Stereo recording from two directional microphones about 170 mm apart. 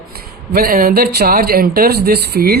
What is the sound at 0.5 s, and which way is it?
Speech, 60° right (ahead or behind).